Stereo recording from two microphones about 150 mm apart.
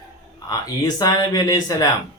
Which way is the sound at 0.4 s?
25° left (ahead or behind).